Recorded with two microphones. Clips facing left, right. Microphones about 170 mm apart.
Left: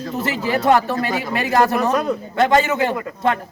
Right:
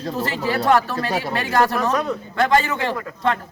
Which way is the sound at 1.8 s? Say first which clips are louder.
Left 2 dB; 5° left (ahead or behind).